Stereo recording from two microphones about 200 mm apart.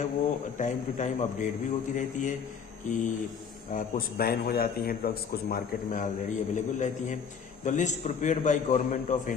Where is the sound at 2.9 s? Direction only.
40° left (ahead or behind).